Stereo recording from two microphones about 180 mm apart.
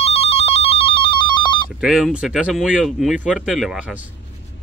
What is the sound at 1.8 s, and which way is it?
Speech, centre (ahead or behind).